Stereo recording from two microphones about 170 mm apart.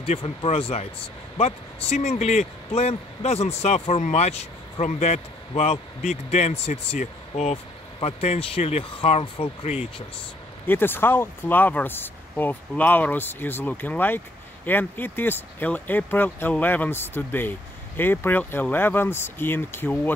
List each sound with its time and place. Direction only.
0.0 s speech: 30° left (ahead or behind)
10.7 s speech: 15° left (ahead or behind)